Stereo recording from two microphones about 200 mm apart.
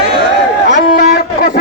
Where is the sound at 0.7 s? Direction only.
45° left (ahead or behind).